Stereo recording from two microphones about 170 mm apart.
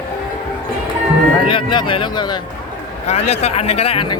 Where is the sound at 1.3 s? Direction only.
30° left (ahead or behind).